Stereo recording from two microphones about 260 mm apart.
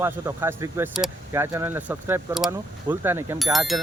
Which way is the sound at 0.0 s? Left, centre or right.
Centre.